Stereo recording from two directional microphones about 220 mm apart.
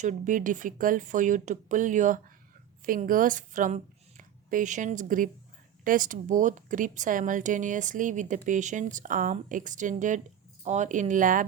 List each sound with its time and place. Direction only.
0.0 s a woman's voice: 35° right (ahead or behind)